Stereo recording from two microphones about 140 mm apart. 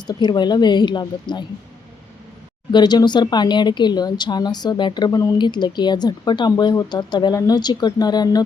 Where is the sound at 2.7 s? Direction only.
30° left (ahead or behind).